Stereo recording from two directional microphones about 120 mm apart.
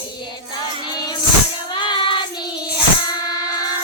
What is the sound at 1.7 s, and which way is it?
Child singing, 40° left (ahead or behind).